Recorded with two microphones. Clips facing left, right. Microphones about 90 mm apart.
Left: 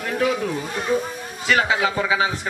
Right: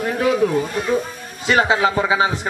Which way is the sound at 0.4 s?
30° right (ahead or behind).